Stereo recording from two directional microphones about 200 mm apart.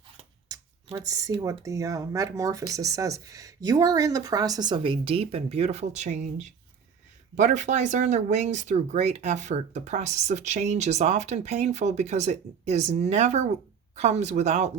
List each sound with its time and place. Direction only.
0.9 s speech: 15° right (ahead or behind); by 14.7 s 35° right (ahead or behind)